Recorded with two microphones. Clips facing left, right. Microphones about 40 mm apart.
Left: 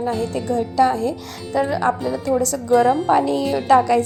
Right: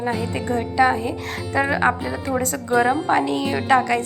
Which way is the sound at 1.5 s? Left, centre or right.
Right.